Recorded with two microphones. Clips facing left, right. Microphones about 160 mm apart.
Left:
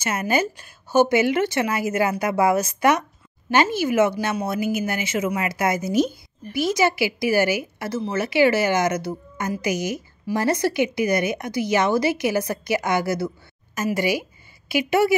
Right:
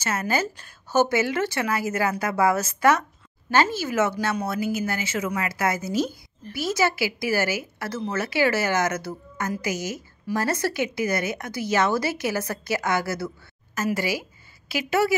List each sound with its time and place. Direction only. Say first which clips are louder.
0.0 s a woman's voice: left 3 dB; 15° left (ahead or behind)